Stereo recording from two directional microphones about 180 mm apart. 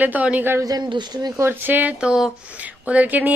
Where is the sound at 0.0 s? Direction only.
10° right (ahead or behind).